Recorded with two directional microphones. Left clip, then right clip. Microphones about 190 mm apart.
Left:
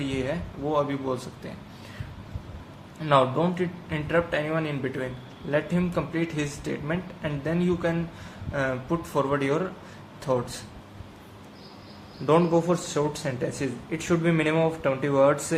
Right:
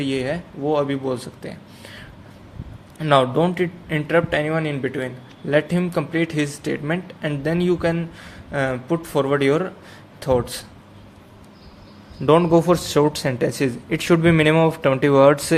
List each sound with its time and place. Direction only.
0.0 s speech: 45° right (ahead or behind)
3.0 s speech: 45° right (ahead or behind)
12.2 s speech: 45° right (ahead or behind)